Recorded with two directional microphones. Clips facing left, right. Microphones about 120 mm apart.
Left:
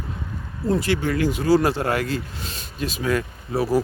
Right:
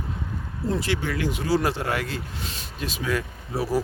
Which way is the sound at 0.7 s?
45° left (ahead or behind).